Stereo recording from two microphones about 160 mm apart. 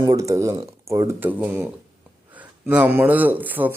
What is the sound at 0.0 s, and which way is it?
Speech, 20° right (ahead or behind).